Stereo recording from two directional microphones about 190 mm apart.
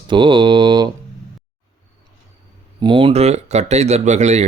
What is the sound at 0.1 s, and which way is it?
Mantra, 25° right (ahead or behind).